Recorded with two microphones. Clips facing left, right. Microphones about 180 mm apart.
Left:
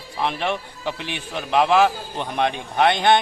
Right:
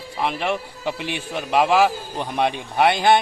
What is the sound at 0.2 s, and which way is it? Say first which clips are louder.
A man's voice: right 1 dB; 5° right (ahead or behind).